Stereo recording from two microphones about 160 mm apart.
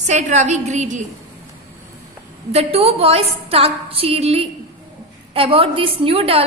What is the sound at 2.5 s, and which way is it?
A woman's voice, 40° right (ahead or behind).